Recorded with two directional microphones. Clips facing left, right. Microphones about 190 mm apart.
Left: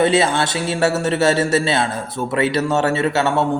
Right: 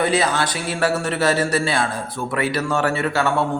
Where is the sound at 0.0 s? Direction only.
25° left (ahead or behind).